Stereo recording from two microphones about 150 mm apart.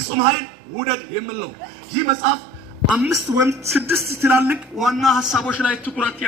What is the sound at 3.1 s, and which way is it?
A woman's voice, 20° right (ahead or behind).